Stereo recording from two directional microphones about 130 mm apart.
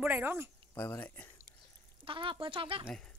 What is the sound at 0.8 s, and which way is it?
Speech, 15° left (ahead or behind).